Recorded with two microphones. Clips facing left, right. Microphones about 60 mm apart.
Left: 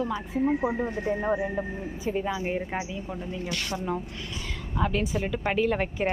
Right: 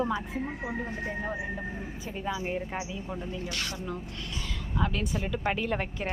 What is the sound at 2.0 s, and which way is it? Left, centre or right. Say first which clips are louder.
Speech: left 5 dB; centre.